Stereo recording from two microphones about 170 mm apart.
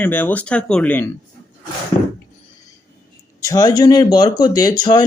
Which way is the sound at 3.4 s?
20° left (ahead or behind).